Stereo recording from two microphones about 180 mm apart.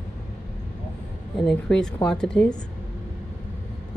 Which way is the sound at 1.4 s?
5° left (ahead or behind).